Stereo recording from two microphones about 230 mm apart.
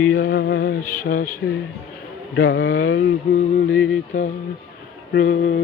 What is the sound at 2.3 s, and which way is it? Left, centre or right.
Speech, left.